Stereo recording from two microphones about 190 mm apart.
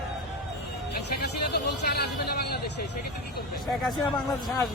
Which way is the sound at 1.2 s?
60° left (ahead or behind).